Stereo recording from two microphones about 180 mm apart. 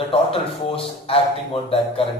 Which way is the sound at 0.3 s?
30° left (ahead or behind).